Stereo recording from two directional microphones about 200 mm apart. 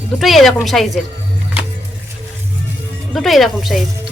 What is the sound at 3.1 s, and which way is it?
Speech, centre (ahead or behind).